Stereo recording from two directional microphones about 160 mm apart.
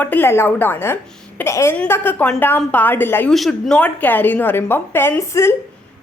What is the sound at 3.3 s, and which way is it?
A woman's voice, centre (ahead or behind).